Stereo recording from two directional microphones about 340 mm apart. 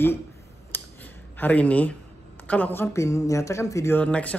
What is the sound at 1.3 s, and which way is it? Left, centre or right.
A man's voice, centre.